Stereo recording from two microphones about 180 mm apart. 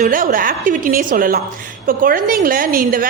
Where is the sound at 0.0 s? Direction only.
50° right (ahead or behind).